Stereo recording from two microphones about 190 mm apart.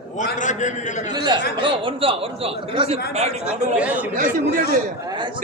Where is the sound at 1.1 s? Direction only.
20° right (ahead or behind).